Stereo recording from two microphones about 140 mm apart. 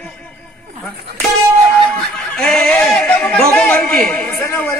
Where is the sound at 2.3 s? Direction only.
5° left (ahead or behind).